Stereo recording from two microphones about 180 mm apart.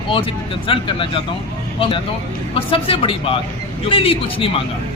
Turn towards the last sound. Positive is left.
turn(degrees=30)  # may be behind; listen again after turning